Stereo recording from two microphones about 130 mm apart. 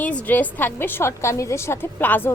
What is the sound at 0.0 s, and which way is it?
A woman's voice, 10° left (ahead or behind).